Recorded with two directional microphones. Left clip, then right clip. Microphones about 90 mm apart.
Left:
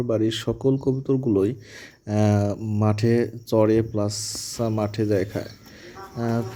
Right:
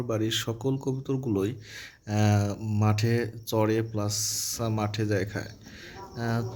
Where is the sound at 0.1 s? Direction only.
60° left (ahead or behind).